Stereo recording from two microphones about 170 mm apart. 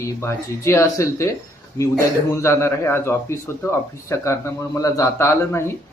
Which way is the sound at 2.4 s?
15° left (ahead or behind).